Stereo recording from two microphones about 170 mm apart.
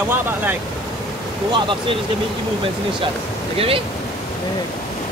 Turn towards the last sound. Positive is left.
turn(degrees=-35)  # may be behind; listen again after turning